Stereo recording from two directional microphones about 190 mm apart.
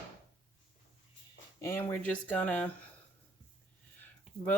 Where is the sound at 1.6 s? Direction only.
10° left (ahead or behind).